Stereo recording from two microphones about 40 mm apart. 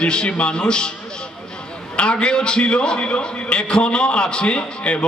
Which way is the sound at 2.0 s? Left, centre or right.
Left.